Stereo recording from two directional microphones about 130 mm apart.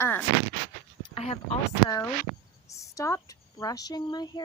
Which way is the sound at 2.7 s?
25° left (ahead or behind).